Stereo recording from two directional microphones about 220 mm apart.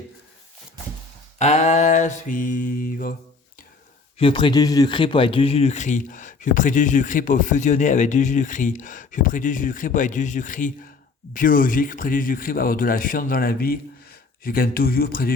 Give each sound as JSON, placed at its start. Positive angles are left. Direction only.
{"t": 1.4, "sound": "a man's voice", "side_deg": 30}
{"t": 4.2, "sound": "a man's voice", "side_deg": 25}